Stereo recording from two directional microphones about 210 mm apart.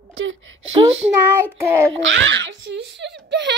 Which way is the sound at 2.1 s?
60° right (ahead or behind).